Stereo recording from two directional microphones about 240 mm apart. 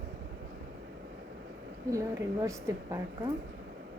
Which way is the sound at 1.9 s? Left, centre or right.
Centre.